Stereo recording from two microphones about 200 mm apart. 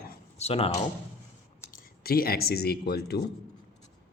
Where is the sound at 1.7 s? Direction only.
50° left (ahead or behind).